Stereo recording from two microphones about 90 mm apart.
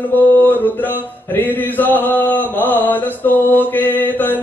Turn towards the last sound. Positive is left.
turn(degrees=20)  # may be behind; listen again after turning